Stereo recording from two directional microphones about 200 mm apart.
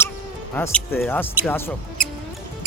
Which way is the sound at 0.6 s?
10° left (ahead or behind).